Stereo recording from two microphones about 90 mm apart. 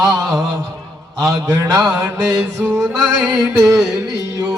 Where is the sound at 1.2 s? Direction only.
40° right (ahead or behind).